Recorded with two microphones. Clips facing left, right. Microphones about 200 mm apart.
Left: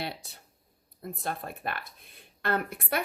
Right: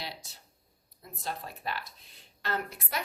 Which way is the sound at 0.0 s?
60° left (ahead or behind).